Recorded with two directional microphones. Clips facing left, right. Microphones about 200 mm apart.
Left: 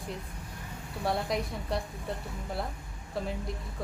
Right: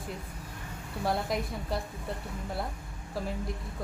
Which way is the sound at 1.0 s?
Centre (ahead or behind).